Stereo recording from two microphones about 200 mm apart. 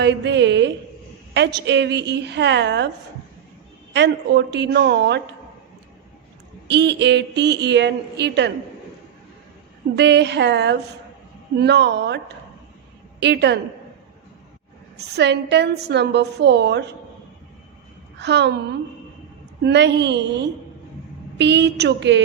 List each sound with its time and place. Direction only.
0.0 s a woman's voice: 60° right (ahead or behind)
3.9 s a woman's voice: 60° right (ahead or behind)
6.7 s a woman's voice: 60° right (ahead or behind)
9.9 s a woman's voice: 60° right (ahead or behind)
14.9 s a woman's voice: 55° right (ahead or behind)
18.2 s a woman's voice: 60° right (ahead or behind)
19.6 s a woman's voice: 60° right (ahead or behind)